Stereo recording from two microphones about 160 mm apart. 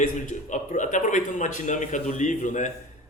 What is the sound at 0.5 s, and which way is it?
A man's voice, 50° left (ahead or behind).